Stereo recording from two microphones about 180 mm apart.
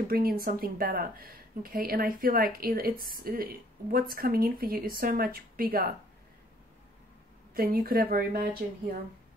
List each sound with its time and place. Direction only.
0.1 s speech: 55° right (ahead or behind)
7.5 s speech: 55° right (ahead or behind)